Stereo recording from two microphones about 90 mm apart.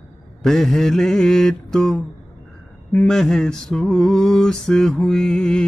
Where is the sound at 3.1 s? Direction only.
5° left (ahead or behind).